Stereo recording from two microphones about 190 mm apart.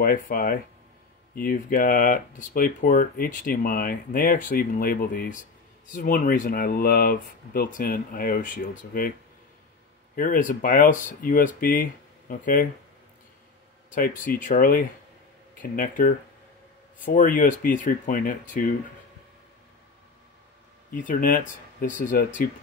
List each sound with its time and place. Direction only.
0.0 s speech: 50° left (ahead or behind)
10.1 s speech: 45° left (ahead or behind)
13.9 s speech: 45° left (ahead or behind)
20.9 s speech: 45° left (ahead or behind)